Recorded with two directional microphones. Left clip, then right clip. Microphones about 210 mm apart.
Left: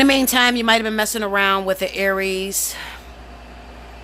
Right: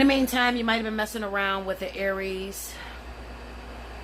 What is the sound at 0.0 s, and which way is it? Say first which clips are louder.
Speech: left 7 dB; 50° left (ahead or behind).